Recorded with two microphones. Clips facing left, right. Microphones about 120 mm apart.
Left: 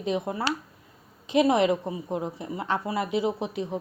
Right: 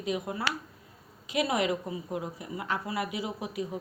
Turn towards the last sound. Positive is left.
turn(degrees=25)  # may be behind; listen again after turning